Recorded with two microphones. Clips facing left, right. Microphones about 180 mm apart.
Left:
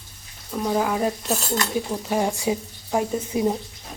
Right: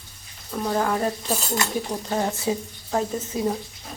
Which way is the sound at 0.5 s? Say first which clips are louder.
Left 1 dB; 5° left (ahead or behind).